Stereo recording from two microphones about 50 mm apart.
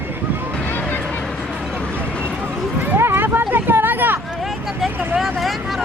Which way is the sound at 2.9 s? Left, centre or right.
Right.